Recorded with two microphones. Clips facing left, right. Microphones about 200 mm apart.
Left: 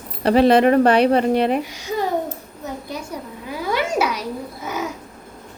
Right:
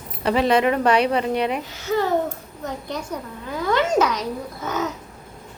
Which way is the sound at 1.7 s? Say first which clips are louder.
Right 2 dB; 15° left (ahead or behind).